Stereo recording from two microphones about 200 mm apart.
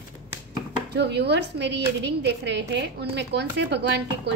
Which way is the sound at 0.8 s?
55° right (ahead or behind).